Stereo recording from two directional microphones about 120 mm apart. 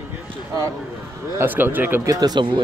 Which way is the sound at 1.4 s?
15° right (ahead or behind).